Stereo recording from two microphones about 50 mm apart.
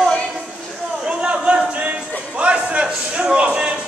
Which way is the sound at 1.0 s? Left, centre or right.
Right.